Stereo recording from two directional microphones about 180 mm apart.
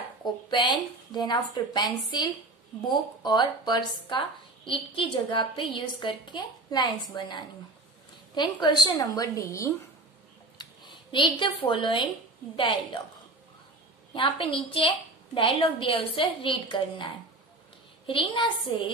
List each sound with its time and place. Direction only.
0.5 s a woman's voice: 25° left (ahead or behind)
14.1 s a woman's voice: 30° left (ahead or behind)